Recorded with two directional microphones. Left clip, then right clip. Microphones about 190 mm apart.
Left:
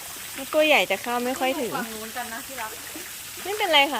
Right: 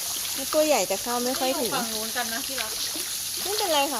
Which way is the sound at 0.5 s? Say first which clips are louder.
Left 3 dB; 10° left (ahead or behind).